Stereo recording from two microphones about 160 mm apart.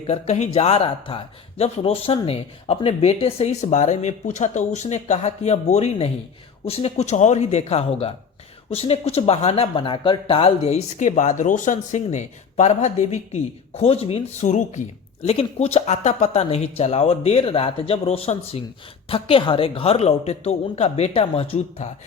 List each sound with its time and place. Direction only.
0.1 s speech: 45° left (ahead or behind)